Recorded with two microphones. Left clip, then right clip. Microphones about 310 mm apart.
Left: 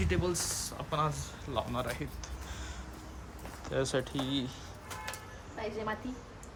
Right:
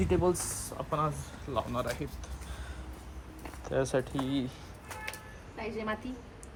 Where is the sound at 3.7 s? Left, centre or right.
Centre.